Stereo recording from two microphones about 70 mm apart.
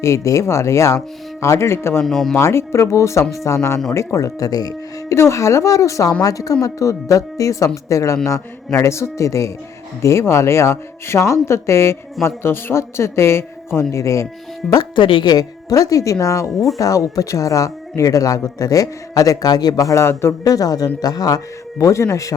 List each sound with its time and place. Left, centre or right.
0.0 s speech: left
2.0 s speech: centre
2.3 s a man's voice: left
5.1 s a man's voice: left
14.6 s speech: centre
15.3 s speech: left
20.4 s speech: left